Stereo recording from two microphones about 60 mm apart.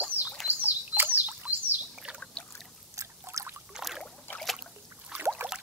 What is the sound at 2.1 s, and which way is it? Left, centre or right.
Pour, centre.